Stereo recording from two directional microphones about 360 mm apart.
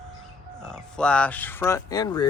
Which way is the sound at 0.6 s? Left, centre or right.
Centre.